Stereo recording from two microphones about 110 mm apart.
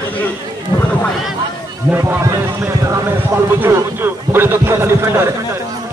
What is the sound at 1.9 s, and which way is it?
A man's voice, 20° right (ahead or behind).